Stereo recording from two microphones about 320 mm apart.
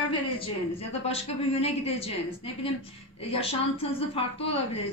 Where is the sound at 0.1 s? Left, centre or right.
Centre.